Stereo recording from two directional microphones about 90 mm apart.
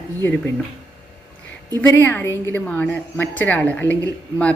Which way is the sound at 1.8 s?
25° left (ahead or behind).